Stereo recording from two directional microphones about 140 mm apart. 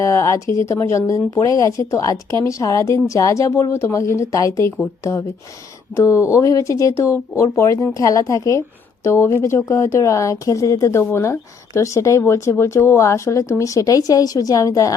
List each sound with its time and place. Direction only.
0.0 s speech: 20° left (ahead or behind)
6.0 s speech: 20° left (ahead or behind)